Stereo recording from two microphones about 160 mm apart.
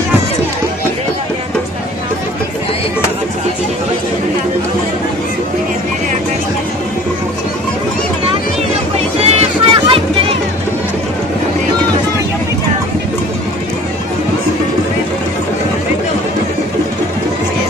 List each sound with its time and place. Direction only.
8.9 s music: 40° right (ahead or behind)